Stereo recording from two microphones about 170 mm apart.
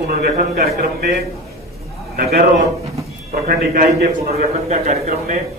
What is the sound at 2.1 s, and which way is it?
Speech, 65° right (ahead or behind).